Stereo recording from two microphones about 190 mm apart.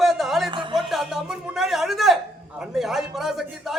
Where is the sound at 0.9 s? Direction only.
Centre (ahead or behind).